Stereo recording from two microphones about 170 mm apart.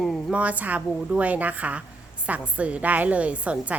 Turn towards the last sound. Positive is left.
turn(degrees=-10)  # may be behind; listen again after turning